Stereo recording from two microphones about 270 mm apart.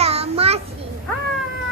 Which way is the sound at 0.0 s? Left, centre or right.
Right.